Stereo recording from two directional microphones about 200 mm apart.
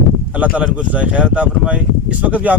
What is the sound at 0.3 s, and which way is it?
Speech, 5° right (ahead or behind).